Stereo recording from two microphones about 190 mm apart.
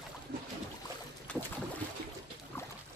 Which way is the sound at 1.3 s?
5° left (ahead or behind).